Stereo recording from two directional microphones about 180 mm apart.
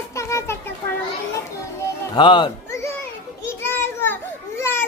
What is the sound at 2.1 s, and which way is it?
Speech, 25° left (ahead or behind).